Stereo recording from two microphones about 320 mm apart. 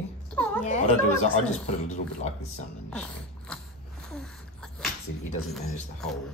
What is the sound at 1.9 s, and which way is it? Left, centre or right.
Speech, left.